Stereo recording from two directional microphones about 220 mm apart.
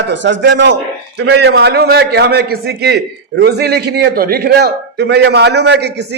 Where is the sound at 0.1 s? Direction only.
55° right (ahead or behind).